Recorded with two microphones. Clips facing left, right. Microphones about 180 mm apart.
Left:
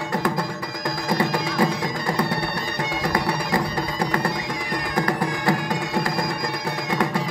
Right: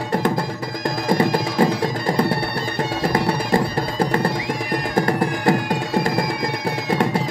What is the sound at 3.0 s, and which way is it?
Music, 30° right (ahead or behind).